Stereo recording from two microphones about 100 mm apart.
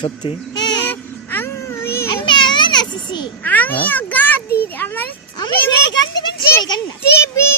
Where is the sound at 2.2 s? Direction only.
50° left (ahead or behind).